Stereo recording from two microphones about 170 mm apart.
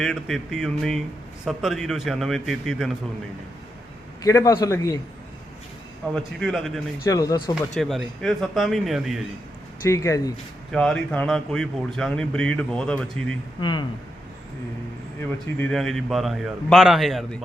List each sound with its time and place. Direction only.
0.0 s speech: centre (ahead or behind)
4.2 s a man's voice: 20° left (ahead or behind)
6.1 s speech: centre (ahead or behind)
7.0 s a man's voice: 20° left (ahead or behind)
7.8 s speech: centre (ahead or behind)
9.8 s speech: 15° left (ahead or behind)
10.7 s speech: 5° left (ahead or behind)
13.6 s a man's voice: 25° left (ahead or behind)
15.5 s speech: 5° left (ahead or behind)